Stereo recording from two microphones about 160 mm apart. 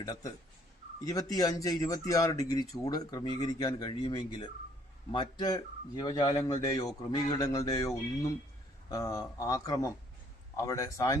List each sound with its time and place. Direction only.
0.0 s speech: 20° left (ahead or behind)